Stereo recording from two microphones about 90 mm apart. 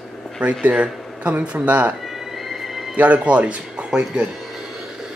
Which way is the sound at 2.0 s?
5° right (ahead or behind).